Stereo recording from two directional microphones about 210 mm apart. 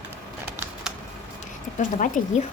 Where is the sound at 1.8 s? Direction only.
35° left (ahead or behind).